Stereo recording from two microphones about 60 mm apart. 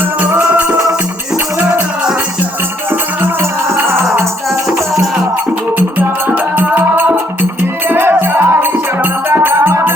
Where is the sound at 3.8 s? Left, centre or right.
Right.